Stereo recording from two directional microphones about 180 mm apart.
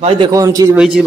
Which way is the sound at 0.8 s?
5° right (ahead or behind).